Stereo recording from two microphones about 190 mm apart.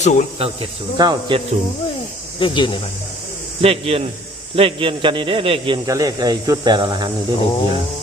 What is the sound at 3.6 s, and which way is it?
A man's voice, 30° right (ahead or behind).